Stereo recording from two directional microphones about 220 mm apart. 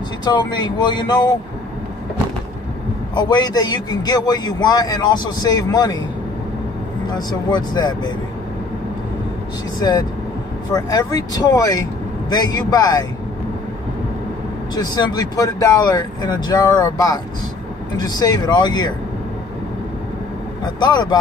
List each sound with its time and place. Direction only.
0.2 s speech: 20° left (ahead or behind)
3.2 s a man's voice: 20° left (ahead or behind)
7.1 s speech: 20° left (ahead or behind)
9.8 s a man's voice: 20° left (ahead or behind)
14.8 s a man's voice: 20° left (ahead or behind)
20.6 s speech: 20° left (ahead or behind)